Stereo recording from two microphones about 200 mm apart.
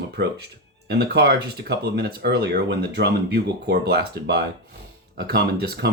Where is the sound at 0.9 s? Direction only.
55° right (ahead or behind).